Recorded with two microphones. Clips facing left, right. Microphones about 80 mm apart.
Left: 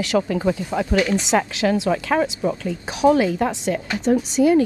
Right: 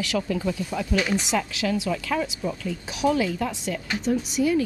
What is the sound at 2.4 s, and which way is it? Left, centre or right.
Speech, left.